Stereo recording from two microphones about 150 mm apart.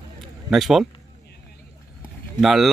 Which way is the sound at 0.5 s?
Centre (ahead or behind).